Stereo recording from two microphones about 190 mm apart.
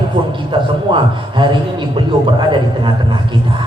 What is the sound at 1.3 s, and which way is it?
Speech, 25° right (ahead or behind).